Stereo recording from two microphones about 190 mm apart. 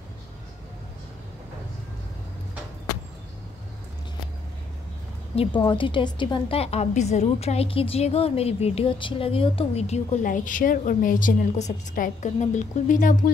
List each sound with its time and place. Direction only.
5.3 s a woman's voice: 30° left (ahead or behind)